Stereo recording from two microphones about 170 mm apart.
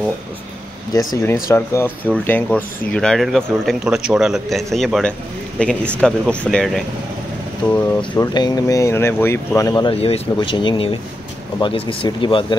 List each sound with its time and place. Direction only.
0.9 s speech: 15° left (ahead or behind)
8.2 s speech: 25° left (ahead or behind)
9.9 s speech: 35° left (ahead or behind)